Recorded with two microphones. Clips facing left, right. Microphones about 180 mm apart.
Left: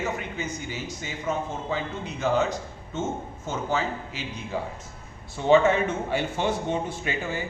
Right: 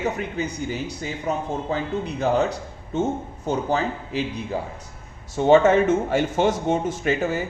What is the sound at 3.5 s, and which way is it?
Speech, 35° right (ahead or behind).